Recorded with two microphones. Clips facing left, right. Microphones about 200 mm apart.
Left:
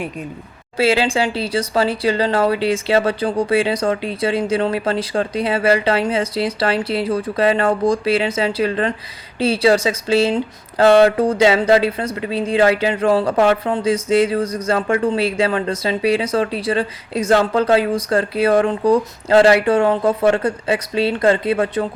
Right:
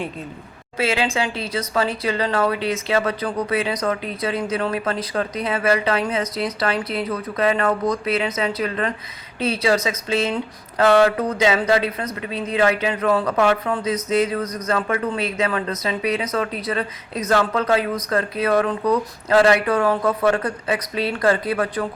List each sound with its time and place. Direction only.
0.8 s speech: 30° left (ahead or behind)